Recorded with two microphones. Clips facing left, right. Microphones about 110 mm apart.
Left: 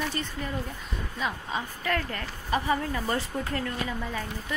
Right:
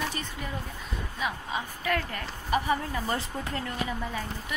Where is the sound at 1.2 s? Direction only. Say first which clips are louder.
Left 1 dB; 10° right (ahead or behind).